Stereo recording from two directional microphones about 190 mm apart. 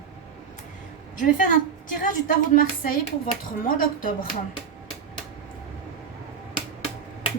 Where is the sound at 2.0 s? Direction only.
45° left (ahead or behind).